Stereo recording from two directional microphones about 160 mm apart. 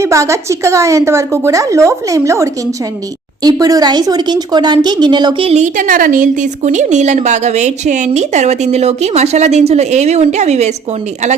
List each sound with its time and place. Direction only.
0.0 s a woman's voice: 20° right (ahead or behind); by 10.7 s 45° right (ahead or behind)